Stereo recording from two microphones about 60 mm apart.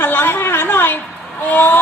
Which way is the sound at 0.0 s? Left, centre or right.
Left.